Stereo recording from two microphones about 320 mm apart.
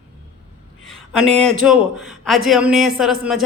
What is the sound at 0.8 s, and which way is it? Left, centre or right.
A man's voice, centre.